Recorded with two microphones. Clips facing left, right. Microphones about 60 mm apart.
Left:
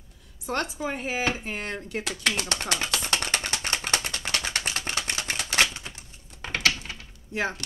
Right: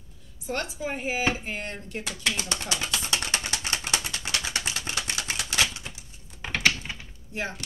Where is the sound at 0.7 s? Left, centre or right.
Left.